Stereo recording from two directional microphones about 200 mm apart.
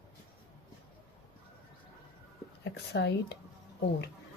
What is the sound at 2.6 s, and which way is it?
Speech, 55° left (ahead or behind).